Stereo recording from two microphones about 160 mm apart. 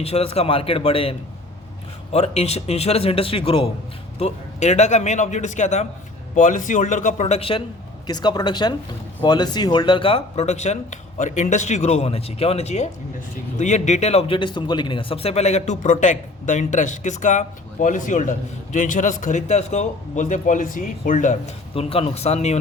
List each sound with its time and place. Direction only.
0.0 s speech: 40° left (ahead or behind)
2.1 s a man's voice: 40° left (ahead or behind)
8.0 s a man's voice: 25° left (ahead or behind); by 22.5 s 45° left (ahead or behind)